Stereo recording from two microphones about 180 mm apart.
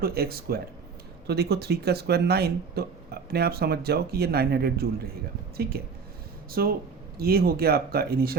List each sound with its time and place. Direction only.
0.0 s speech: 55° right (ahead or behind)
6.5 s speech: 55° right (ahead or behind)